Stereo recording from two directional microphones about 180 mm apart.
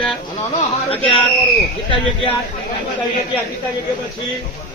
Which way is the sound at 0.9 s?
10° left (ahead or behind).